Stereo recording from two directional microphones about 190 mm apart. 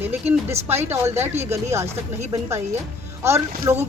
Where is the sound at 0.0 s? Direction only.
10° right (ahead or behind).